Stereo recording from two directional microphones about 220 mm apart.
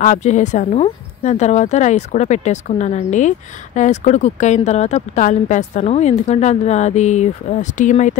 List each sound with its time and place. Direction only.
0.0 s speech: 35° left (ahead or behind)